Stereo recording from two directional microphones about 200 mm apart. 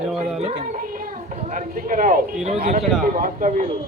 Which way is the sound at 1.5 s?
45° right (ahead or behind).